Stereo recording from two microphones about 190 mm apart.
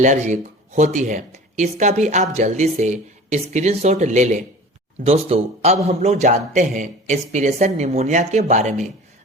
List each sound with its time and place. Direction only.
0.0 s a man's voice: 40° right (ahead or behind)